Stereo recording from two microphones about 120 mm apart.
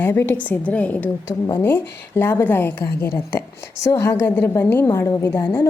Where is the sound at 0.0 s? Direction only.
15° left (ahead or behind).